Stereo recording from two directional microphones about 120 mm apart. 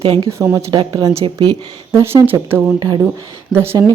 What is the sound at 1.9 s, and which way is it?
Speech, 15° right (ahead or behind).